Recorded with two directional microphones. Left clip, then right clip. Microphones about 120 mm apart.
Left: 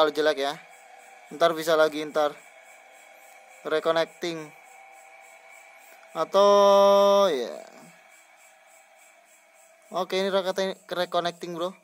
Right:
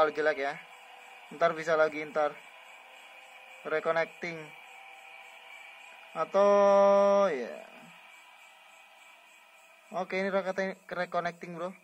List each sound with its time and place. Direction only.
0.0 s speech: 65° left (ahead or behind)
3.6 s speech: 70° left (ahead or behind)
6.1 s speech: 70° left (ahead or behind)
9.8 s speech: 75° left (ahead or behind)